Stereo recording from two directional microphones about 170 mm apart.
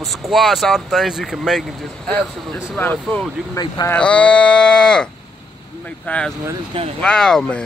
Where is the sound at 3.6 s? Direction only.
25° left (ahead or behind).